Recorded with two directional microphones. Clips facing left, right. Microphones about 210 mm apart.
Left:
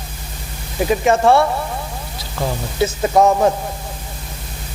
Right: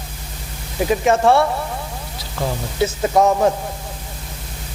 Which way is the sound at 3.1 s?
30° left (ahead or behind).